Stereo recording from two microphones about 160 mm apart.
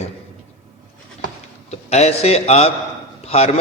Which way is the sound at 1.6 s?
40° left (ahead or behind).